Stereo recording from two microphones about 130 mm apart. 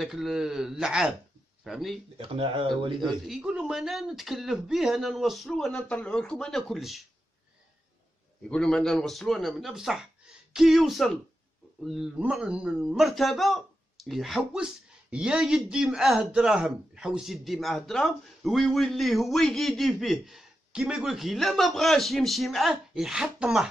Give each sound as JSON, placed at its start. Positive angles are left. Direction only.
{"t": 0.0, "sound": "speech", "side_deg": 0}
{"t": 2.1, "sound": "speech", "side_deg": -45}
{"t": 3.0, "sound": "speech", "side_deg": 0}
{"t": 8.5, "sound": "speech", "side_deg": 5}